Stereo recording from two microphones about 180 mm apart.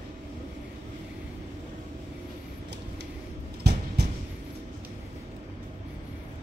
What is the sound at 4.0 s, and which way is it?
Train, 65° right (ahead or behind).